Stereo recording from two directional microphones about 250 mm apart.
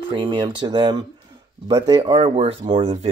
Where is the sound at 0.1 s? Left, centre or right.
Centre.